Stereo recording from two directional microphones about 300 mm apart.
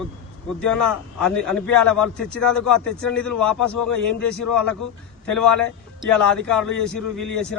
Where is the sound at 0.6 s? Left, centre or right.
Centre.